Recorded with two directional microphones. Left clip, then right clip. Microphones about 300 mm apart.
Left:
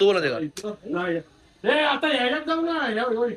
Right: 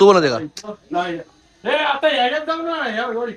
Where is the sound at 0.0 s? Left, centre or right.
Right.